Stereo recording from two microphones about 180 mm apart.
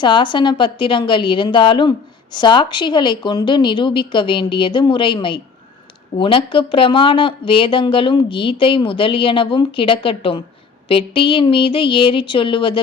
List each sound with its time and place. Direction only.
0.0 s a woman's voice: 25° left (ahead or behind)